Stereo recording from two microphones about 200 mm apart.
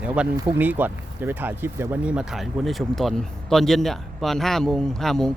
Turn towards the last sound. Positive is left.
turn(degrees=0)  # may be behind; listen again after turning